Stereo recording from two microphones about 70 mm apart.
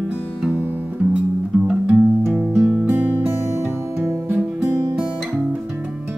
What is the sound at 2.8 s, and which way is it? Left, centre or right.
Music, right.